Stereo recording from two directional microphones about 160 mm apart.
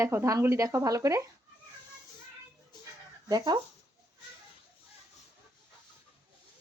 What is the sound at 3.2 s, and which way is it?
Speech, 25° right (ahead or behind).